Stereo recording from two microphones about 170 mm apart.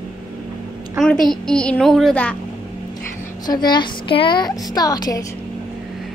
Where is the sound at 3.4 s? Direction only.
25° left (ahead or behind).